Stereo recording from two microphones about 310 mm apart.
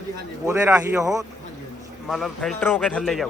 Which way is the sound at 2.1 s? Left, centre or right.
Centre.